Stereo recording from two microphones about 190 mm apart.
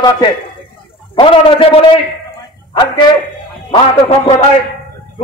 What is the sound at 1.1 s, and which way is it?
Speech, 25° left (ahead or behind).